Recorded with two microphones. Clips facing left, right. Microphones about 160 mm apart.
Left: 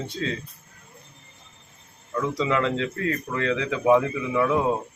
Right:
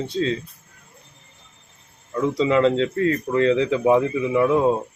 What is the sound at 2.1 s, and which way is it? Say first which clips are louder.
Speech: right 5 dB; 25° right (ahead or behind).